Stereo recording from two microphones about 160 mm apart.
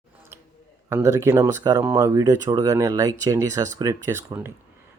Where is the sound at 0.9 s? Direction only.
15° right (ahead or behind).